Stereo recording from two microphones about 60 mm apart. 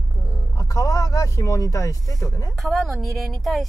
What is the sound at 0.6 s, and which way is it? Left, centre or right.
Speech, left.